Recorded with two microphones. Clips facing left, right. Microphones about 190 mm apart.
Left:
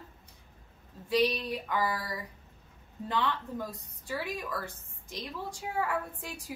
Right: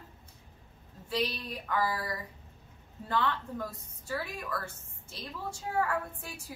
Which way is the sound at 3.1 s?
15° left (ahead or behind).